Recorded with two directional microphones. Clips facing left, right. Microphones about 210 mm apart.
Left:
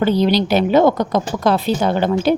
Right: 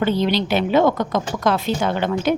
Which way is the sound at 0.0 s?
40° left (ahead or behind).